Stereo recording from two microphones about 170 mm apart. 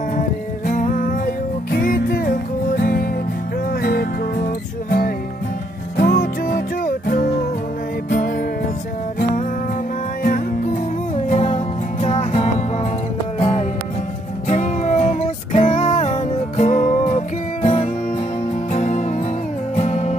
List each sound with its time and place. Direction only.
0.7 s music: 50° left (ahead or behind)
10.2 s music: 50° left (ahead or behind)